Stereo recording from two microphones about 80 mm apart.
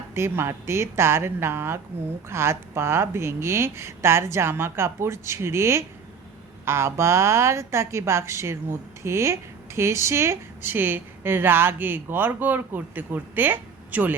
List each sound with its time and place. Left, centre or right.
0.1 s a woman's voice: right